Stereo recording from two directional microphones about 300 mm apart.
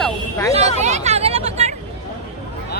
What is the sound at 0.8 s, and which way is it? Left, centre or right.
Hubbub, right.